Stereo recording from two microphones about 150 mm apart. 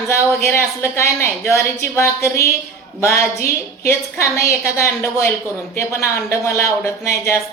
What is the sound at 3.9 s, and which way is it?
A woman's voice, 20° left (ahead or behind).